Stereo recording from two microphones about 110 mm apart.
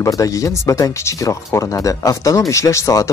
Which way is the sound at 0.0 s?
30° left (ahead or behind).